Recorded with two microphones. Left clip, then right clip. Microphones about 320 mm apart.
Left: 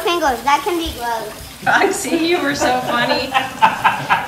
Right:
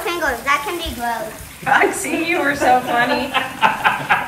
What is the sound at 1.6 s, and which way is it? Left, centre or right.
A woman's voice, centre.